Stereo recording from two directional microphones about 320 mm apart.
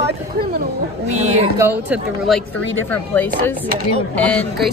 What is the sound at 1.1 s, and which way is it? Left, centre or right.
Speech, centre.